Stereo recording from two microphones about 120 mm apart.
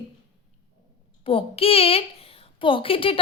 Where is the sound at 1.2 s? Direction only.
50° left (ahead or behind).